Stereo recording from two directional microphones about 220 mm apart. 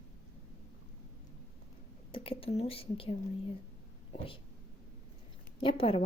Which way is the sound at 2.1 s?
25° left (ahead or behind).